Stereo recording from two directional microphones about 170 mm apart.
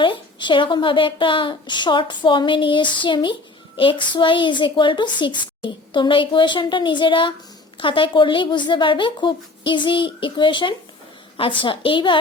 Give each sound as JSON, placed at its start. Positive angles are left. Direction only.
{"t": 0.0, "sound": "a child's voice", "side_deg": 30}